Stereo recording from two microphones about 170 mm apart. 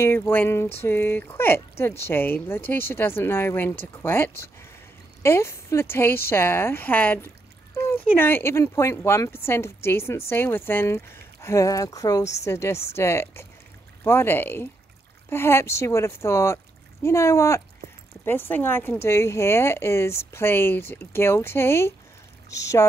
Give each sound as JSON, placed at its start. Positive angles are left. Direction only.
{"t": 0.0, "sound": "speech", "side_deg": 15}